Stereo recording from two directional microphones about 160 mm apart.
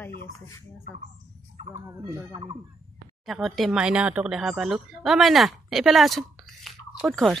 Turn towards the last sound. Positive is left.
turn(degrees=0)  # may be behind; listen again after turning